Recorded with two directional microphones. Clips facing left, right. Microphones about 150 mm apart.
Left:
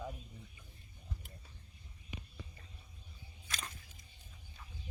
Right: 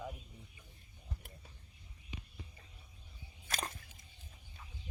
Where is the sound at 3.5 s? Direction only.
50° right (ahead or behind).